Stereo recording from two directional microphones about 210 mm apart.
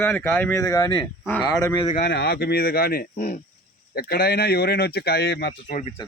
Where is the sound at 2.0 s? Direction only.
50° left (ahead or behind).